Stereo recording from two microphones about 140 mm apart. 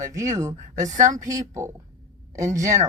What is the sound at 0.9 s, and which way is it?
Speech, 60° right (ahead or behind).